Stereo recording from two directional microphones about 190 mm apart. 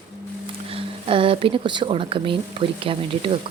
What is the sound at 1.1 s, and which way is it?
A woman's voice, 30° right (ahead or behind).